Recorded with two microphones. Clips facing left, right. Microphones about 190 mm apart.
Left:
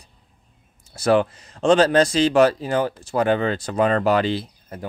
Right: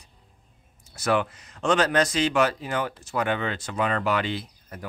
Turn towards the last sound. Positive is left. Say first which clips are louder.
# left 6 dB
turn(degrees=30)  # may be behind; listen again after turning